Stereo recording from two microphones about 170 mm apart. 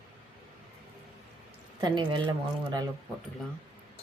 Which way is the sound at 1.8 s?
25° right (ahead or behind).